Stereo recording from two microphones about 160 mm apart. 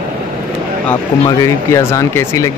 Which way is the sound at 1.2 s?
20° left (ahead or behind).